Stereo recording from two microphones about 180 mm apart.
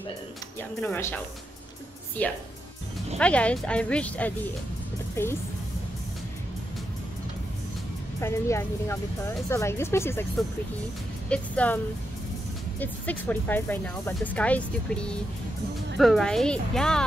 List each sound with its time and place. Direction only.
0.6 s speech: 10° left (ahead or behind)
8.2 s speech: 15° left (ahead or behind)
11.2 s speech: 5° left (ahead or behind)